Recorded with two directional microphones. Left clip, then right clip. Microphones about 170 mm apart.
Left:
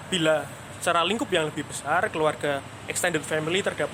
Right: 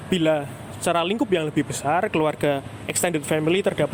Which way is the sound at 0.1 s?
30° right (ahead or behind).